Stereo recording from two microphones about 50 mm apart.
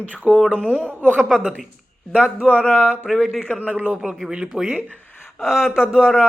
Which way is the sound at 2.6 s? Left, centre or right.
Left.